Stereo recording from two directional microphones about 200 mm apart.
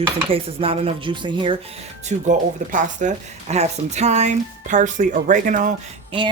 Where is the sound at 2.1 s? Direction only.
35° right (ahead or behind).